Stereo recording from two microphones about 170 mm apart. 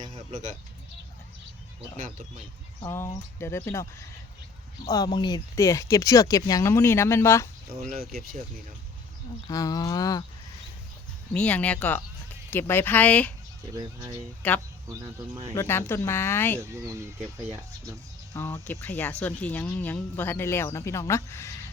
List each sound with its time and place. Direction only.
0.0 s a sound: 45° right (ahead or behind)
2.0 s speech: 45° right (ahead or behind)
2.8 s speech: 15° left (ahead or behind)
4.9 s speech: 20° left (ahead or behind)
7.8 s speech: 55° right (ahead or behind)
9.5 s speech: 20° left (ahead or behind)
11.3 s speech: 10° left (ahead or behind)
14.4 s speech: 10° left (ahead or behind)
16.6 s speech: 15° right (ahead or behind)
18.3 s speech: 10° left (ahead or behind)